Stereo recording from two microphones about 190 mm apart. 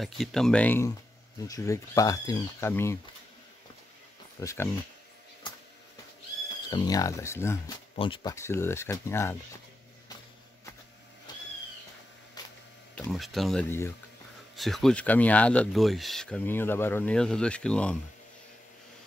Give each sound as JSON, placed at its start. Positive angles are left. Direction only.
{"t": 0.0, "sound": "speech", "side_deg": 0}
{"t": 4.4, "sound": "speech", "side_deg": 15}
{"t": 5.4, "sound": "a sound", "side_deg": 25}
{"t": 6.7, "sound": "speech", "side_deg": 20}
{"t": 7.9, "sound": "speech", "side_deg": 30}
{"t": 11.3, "sound": "a sound", "side_deg": 20}
{"t": 12.4, "sound": "camera", "side_deg": 20}
{"t": 13.1, "sound": "speech", "side_deg": 0}
{"t": 14.5, "sound": "speech", "side_deg": 0}